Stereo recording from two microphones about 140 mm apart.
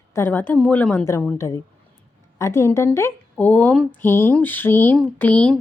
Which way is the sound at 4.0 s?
15° left (ahead or behind).